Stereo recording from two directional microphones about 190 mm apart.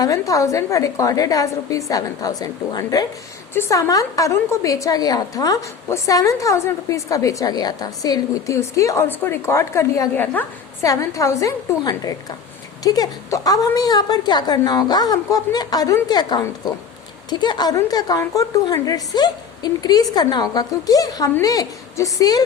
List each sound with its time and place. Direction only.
0.0 s a woman's voice: 15° left (ahead or behind)